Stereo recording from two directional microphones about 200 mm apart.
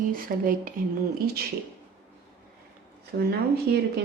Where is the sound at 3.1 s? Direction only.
55° right (ahead or behind).